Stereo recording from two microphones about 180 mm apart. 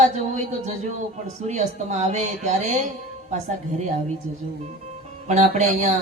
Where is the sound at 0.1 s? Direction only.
40° right (ahead or behind).